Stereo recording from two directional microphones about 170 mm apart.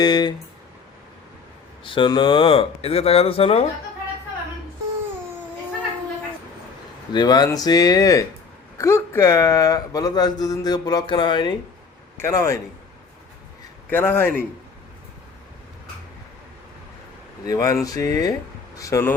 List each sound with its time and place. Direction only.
0.0 s speech: 25° left (ahead or behind)
1.8 s speech: 30° left (ahead or behind)
7.1 s speech: 25° left (ahead or behind)
12.1 s a man's voice: 15° left (ahead or behind)
13.9 s a man's voice: 10° left (ahead or behind)
17.4 s a man's voice: 20° left (ahead or behind)